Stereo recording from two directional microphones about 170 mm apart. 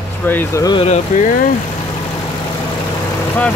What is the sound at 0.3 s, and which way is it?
Speech, 10° left (ahead or behind).